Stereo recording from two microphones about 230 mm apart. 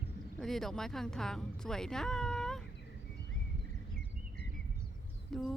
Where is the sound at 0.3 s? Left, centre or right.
Centre.